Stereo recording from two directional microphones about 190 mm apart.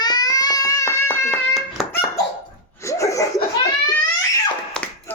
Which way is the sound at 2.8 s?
15° left (ahead or behind).